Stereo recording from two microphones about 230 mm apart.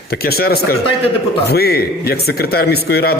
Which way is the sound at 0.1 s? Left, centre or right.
Left.